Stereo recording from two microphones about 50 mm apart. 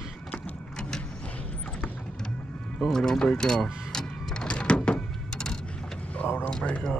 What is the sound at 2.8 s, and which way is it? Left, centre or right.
Speech, centre.